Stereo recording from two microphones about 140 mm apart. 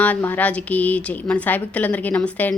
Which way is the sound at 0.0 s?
10° left (ahead or behind).